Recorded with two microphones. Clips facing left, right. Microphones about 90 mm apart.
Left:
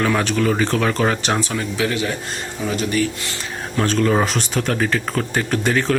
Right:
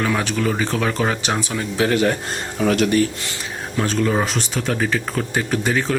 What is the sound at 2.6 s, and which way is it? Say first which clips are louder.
Speech: right 6 dB; 70° right (ahead or behind).